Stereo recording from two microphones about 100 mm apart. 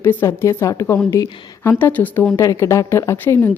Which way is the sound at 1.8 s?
20° left (ahead or behind).